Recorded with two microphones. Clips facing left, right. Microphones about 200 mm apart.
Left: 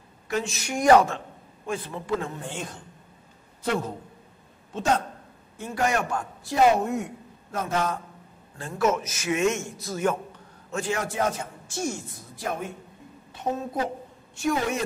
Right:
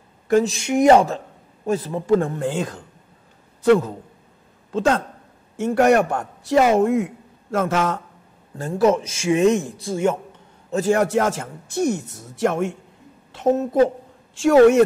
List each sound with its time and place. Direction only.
0.3 s a woman's voice: 40° right (ahead or behind)
0.6 s speech: 25° right (ahead or behind)
1.7 s a man's voice: 40° right (ahead or behind)
4.7 s a woman's voice: 90° right
5.6 s a woman's voice: 65° right (ahead or behind); by 8.0 s 85° right
8.5 s a man's voice: 40° right (ahead or behind)
10.7 s a man's voice: 40° right (ahead or behind)
11.0 s speech: 80° right
13.3 s a woman's voice: 90° right; by 14.9 s 70° right (ahead or behind)